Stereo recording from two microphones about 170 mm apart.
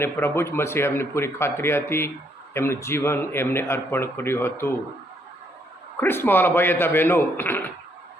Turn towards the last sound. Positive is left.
turn(degrees=10)  # may be behind; listen again after turning